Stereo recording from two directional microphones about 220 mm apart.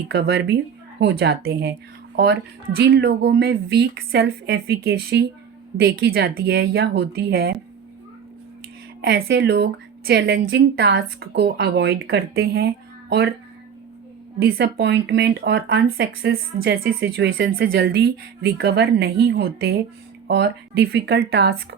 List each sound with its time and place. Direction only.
0.1 s speech: 50° right (ahead or behind)
9.2 s speech: 50° right (ahead or behind)
14.4 s speech: 50° right (ahead or behind)